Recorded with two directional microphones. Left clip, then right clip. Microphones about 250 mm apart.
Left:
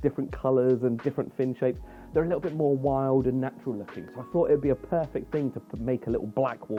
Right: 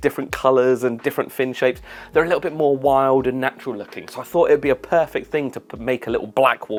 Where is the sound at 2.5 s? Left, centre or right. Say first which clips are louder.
Right 7 dB; right.